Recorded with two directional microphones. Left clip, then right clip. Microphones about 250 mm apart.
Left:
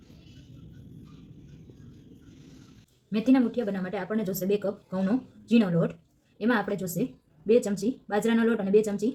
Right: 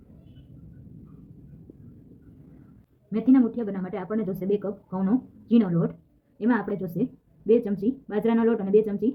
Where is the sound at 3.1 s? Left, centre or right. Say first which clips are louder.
Right 2 dB; centre.